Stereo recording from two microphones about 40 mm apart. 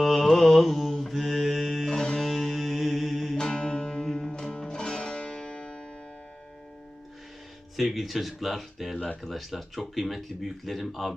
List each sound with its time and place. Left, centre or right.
0.0 s mantra: centre
0.3 s music: centre
3.3 s music: left
7.8 s speech: centre